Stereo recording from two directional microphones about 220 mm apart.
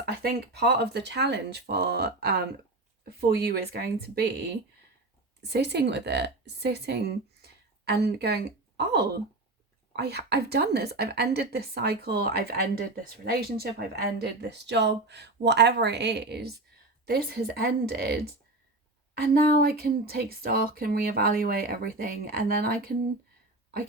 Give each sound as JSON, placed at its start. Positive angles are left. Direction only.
{"t": 0.0, "sound": "a woman's voice", "side_deg": -45}